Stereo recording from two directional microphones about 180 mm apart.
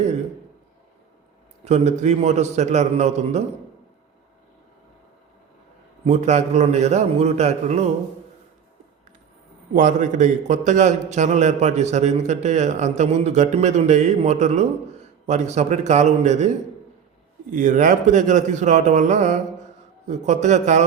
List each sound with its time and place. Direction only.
1.6 s a man's voice: 40° right (ahead or behind)
6.1 s a man's voice: 40° right (ahead or behind)
9.7 s a man's voice: 45° right (ahead or behind)
17.5 s a man's voice: 45° right (ahead or behind)